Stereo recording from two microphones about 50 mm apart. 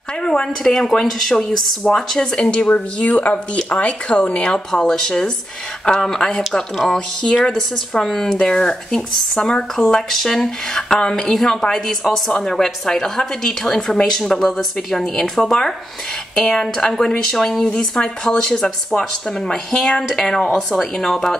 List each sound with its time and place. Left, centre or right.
0.2 s speech: centre
7.5 s speech: centre